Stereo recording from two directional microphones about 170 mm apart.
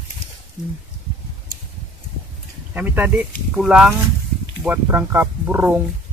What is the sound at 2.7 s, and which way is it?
Speech, 10° right (ahead or behind).